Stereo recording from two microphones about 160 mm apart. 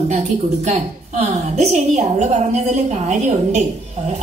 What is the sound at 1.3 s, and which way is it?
A woman's voice, 45° right (ahead or behind).